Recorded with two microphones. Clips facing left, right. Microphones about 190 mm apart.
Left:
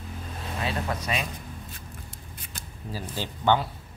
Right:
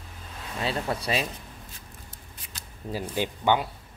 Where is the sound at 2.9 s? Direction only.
15° right (ahead or behind).